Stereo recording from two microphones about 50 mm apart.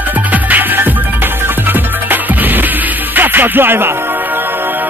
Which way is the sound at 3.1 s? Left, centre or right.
Right.